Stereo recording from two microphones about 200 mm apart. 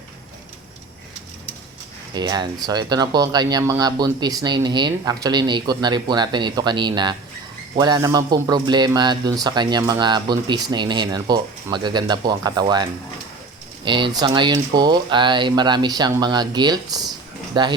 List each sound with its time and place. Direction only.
2.1 s a man's voice: 20° right (ahead or behind)